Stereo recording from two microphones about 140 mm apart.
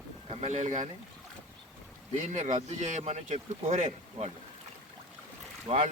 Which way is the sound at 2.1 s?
60° right (ahead or behind).